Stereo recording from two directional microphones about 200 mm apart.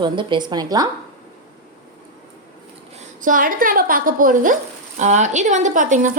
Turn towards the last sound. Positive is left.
turn(degrees=-40)  # may be behind; listen again after turning